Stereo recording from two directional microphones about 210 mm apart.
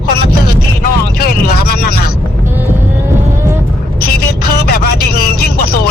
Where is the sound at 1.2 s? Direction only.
45° left (ahead or behind).